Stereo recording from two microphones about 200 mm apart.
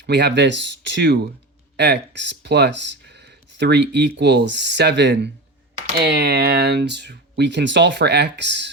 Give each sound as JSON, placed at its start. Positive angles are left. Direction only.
{"t": 0.0, "sound": "speech", "side_deg": -55}